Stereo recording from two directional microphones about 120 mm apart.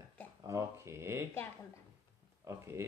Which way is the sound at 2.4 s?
25° right (ahead or behind).